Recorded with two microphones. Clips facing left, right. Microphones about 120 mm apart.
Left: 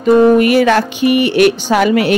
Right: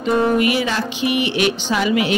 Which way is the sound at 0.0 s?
50° left (ahead or behind).